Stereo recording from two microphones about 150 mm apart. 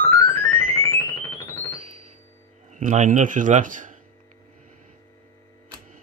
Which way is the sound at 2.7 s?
55° right (ahead or behind).